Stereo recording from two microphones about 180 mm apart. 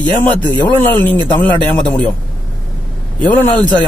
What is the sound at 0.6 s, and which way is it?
Speech, 10° left (ahead or behind).